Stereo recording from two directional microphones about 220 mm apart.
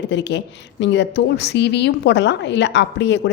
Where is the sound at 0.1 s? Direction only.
50° left (ahead or behind).